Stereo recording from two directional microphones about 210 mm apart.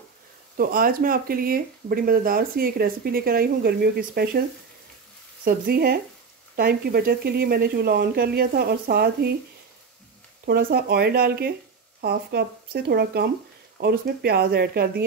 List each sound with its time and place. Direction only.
0.6 s speech: 40° right (ahead or behind)
5.4 s speech: 45° right (ahead or behind)
10.4 s speech: 45° right (ahead or behind)